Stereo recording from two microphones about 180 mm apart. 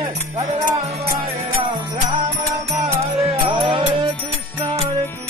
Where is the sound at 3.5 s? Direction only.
30° right (ahead or behind).